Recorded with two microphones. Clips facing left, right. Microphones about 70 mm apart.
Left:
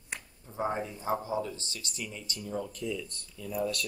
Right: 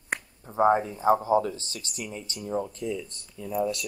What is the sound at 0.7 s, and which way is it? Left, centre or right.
Speech, right.